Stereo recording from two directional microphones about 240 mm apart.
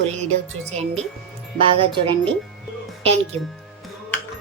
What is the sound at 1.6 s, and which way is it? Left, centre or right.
Speech, right.